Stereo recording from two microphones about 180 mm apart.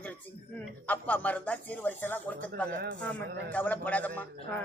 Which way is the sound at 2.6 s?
65° right (ahead or behind).